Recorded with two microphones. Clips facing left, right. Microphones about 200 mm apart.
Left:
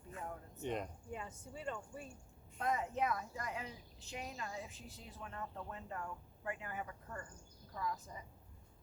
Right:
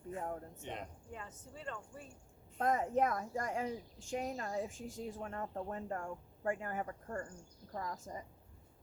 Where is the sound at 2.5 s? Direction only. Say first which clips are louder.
Right 5 dB; 45° right (ahead or behind).